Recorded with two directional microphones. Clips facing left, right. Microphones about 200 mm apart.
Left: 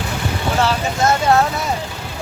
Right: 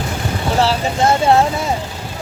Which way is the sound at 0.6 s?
30° right (ahead or behind).